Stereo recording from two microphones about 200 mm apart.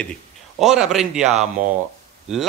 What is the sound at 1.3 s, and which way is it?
Speech, 35° right (ahead or behind).